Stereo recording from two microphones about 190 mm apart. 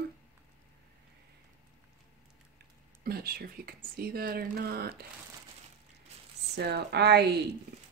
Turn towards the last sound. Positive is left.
turn(degrees=-60)  # may be behind; listen again after turning